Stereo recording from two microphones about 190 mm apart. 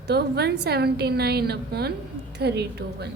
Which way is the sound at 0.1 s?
60° right (ahead or behind).